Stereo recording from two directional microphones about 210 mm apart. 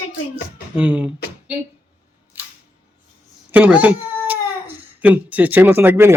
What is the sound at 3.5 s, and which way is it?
Speech, 5° right (ahead or behind).